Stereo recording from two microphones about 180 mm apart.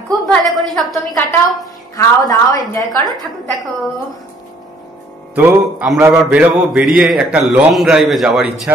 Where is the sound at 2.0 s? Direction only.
20° left (ahead or behind).